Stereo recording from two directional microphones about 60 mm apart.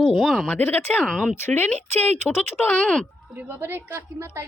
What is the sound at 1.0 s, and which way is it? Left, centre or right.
Speech, centre.